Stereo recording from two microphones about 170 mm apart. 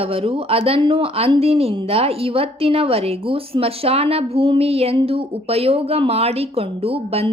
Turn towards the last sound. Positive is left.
turn(degrees=-35)  # may be behind; listen again after turning